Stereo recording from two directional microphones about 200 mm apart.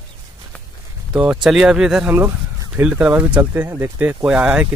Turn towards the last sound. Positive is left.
turn(degrees=-5)  # may be behind; listen again after turning